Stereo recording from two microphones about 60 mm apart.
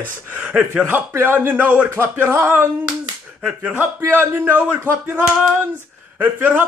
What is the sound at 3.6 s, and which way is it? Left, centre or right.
Speech, right.